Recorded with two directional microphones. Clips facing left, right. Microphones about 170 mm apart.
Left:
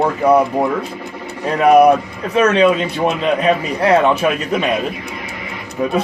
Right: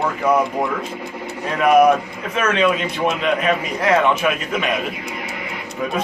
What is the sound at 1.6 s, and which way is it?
Speech, 35° left (ahead or behind).